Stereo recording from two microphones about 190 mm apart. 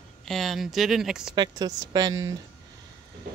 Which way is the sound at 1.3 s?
20° right (ahead or behind).